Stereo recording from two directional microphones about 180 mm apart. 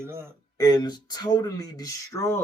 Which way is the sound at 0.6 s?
20° left (ahead or behind).